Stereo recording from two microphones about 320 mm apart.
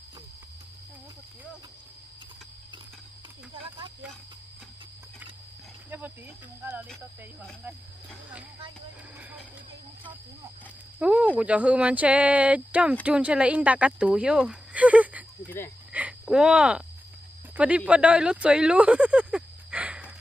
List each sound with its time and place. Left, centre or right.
3.6 s snake: centre
5.9 s wild animals: centre
6.6 s speech: centre
11.0 s speech: centre
15.4 s cricket: centre
15.9 s a sound: centre
17.6 s speech: centre